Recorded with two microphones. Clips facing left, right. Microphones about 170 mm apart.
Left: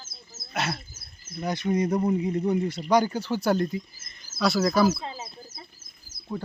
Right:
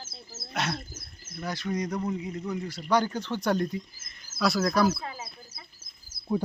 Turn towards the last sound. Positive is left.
turn(degrees=-5)  # may be behind; listen again after turning